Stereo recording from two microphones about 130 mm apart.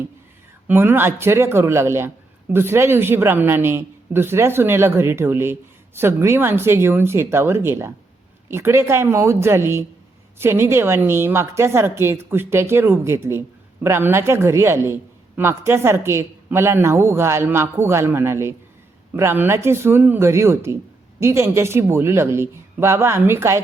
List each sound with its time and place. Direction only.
0.7 s a man's voice: 15° right (ahead or behind)